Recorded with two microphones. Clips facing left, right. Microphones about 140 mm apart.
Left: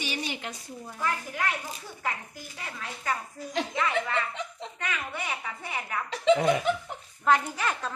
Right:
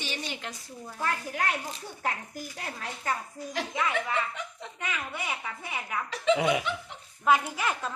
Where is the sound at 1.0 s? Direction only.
45° right (ahead or behind).